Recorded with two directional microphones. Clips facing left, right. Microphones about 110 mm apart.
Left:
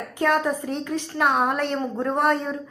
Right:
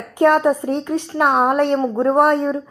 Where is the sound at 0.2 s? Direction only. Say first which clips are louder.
Right 8 dB; 45° right (ahead or behind).